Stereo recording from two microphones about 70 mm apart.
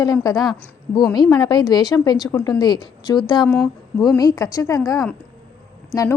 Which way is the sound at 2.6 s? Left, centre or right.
Left.